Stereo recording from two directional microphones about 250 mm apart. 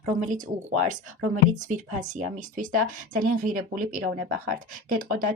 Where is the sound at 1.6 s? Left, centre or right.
Right.